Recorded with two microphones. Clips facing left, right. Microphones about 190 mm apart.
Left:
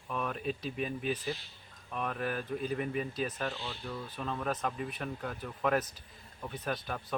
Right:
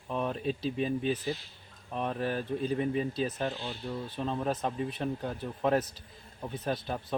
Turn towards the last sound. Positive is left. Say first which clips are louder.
# right 3 dB
turn(degrees=-25)  # may be behind; listen again after turning